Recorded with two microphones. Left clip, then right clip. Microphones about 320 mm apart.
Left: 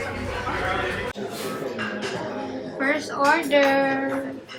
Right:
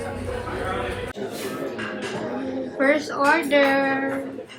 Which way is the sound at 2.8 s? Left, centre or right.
Centre.